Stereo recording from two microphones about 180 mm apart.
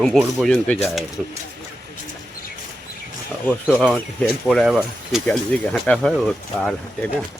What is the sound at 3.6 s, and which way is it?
Speech, 5° right (ahead or behind).